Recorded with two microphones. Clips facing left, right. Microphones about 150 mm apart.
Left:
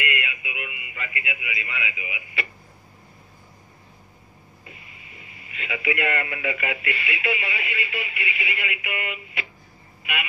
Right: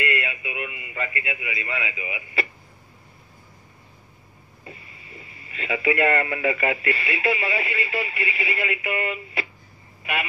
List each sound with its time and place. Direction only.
0.0 s a man's voice: 35° right (ahead or behind)
4.6 s speech: 35° right (ahead or behind)